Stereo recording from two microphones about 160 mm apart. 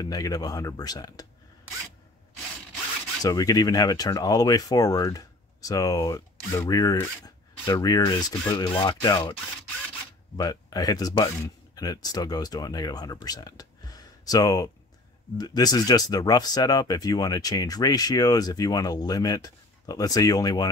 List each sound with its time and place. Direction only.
0.0 s speech: 20° left (ahead or behind)
3.2 s speech: 20° left (ahead or behind)
10.3 s speech: 25° left (ahead or behind)